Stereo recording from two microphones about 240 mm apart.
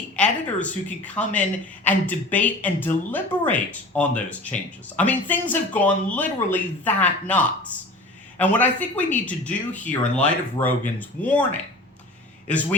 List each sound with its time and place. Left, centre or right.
0.2 s a woman's voice: centre